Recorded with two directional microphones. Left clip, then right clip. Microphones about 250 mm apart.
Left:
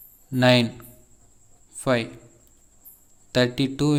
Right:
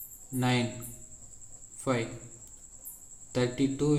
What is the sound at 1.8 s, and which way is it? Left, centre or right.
Speech, left.